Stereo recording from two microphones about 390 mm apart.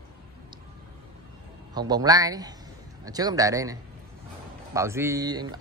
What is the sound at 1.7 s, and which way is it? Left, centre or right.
Speech, centre.